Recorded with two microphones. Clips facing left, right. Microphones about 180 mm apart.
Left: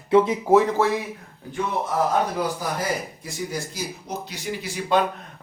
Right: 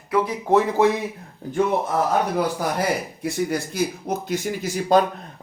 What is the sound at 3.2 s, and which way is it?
Speech, 60° right (ahead or behind).